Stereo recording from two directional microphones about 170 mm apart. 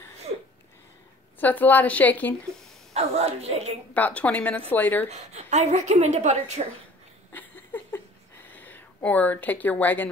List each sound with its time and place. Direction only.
1.4 s a woman's voice: 10° left (ahead or behind)
2.9 s a woman's voice: 40° right (ahead or behind)
3.9 s a woman's voice: 10° left (ahead or behind)
5.1 s a woman's voice: 40° right (ahead or behind)
7.3 s a sound: 10° left (ahead or behind)
8.5 s speech: 10° left (ahead or behind)